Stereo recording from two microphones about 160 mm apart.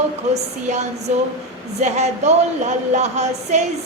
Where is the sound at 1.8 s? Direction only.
45° right (ahead or behind).